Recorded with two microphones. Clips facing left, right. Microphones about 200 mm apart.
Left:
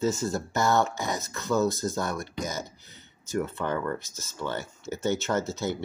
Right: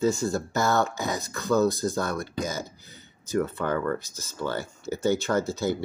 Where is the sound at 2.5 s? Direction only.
20° left (ahead or behind).